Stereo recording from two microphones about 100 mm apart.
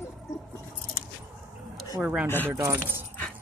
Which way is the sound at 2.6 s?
20° right (ahead or behind).